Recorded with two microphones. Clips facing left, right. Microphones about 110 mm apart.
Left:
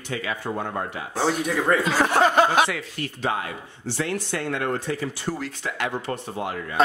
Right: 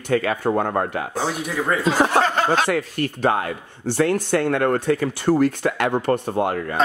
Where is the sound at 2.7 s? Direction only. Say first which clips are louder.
Right 8 dB; 50° right (ahead or behind).